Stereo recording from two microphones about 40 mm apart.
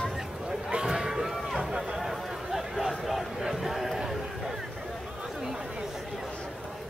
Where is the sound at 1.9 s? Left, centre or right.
Centre.